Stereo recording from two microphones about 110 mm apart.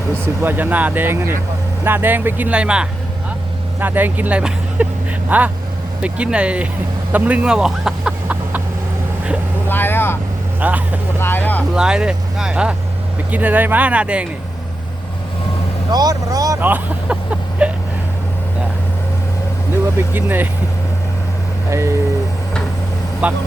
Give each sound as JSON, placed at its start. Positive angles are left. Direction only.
{"t": 0.4, "sound": "speech", "side_deg": -15}
{"t": 7.1, "sound": "chicken", "side_deg": -15}
{"t": 9.6, "sound": "vehicle", "side_deg": 20}
{"t": 10.6, "sound": "speech", "side_deg": -15}
{"t": 11.2, "sound": "vehicle", "side_deg": 20}
{"t": 11.7, "sound": "speech", "side_deg": -5}
{"t": 15.9, "sound": "vehicle", "side_deg": -35}
{"t": 16.6, "sound": "speech", "side_deg": -15}
{"t": 17.6, "sound": "vehicle", "side_deg": -10}
{"t": 20.1, "sound": "speech", "side_deg": -20}
{"t": 21.7, "sound": "speech", "side_deg": -25}
{"t": 23.2, "sound": "speech", "side_deg": -15}